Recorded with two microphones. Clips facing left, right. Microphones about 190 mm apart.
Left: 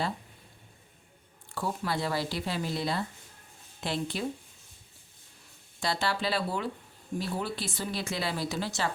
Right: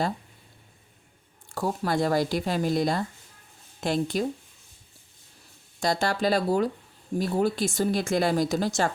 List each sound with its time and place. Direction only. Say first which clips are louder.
1.5 s speech: right 5 dB; 45° right (ahead or behind)
5.8 s speech: right 6 dB; 45° right (ahead or behind)